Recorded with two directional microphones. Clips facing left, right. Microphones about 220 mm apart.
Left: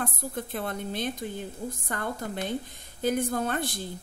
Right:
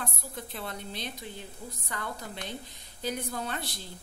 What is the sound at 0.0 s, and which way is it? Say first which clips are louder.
A woman's voice: left 7 dB; 50° left (ahead or behind).